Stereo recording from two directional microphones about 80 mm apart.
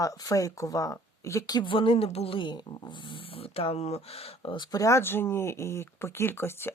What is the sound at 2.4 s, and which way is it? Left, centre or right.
Speech, left.